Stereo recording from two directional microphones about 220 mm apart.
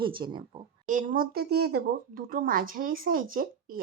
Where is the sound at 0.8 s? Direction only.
35° right (ahead or behind).